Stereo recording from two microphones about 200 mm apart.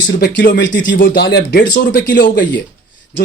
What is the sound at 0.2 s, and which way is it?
Speech, 55° left (ahead or behind).